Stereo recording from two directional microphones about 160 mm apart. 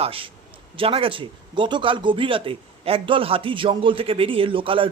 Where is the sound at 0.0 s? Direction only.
35° right (ahead or behind).